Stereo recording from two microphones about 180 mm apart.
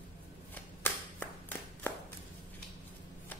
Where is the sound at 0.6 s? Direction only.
10° left (ahead or behind).